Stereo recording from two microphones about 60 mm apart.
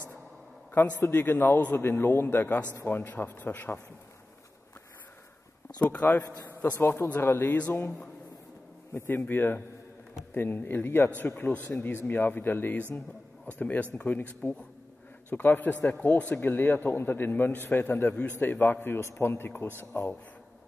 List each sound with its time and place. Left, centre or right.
0.7 s a man's voice: left
5.8 s a man's voice: left
6.6 s a man's voice: left
9.2 s a man's voice: left
13.6 s a man's voice: left